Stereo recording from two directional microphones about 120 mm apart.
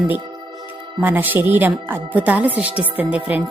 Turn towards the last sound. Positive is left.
turn(degrees=-10)  # may be behind; listen again after turning